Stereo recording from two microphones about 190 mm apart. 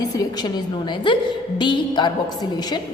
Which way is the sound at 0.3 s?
20° left (ahead or behind).